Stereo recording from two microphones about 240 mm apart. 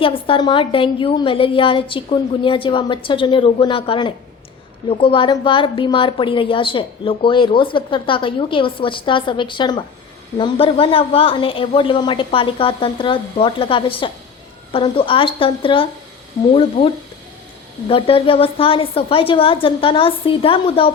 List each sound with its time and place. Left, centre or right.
0.0 s a woman's voice: left